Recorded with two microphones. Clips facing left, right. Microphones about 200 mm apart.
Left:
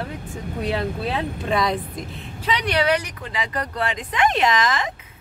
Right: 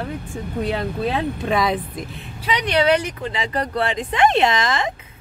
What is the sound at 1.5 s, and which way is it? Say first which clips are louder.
Speech: right 1 dB; 5° right (ahead or behind).